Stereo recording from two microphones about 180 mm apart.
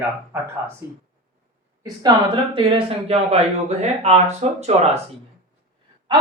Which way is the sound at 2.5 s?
30° right (ahead or behind).